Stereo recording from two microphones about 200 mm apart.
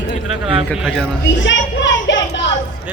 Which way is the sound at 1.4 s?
65° left (ahead or behind).